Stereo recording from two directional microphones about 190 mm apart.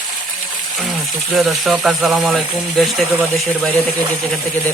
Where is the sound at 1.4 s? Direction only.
Centre (ahead or behind).